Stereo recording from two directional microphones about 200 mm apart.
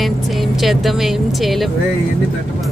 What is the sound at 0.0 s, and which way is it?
Speech, centre (ahead or behind).